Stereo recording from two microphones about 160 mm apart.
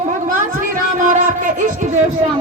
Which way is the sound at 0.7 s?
55° right (ahead or behind).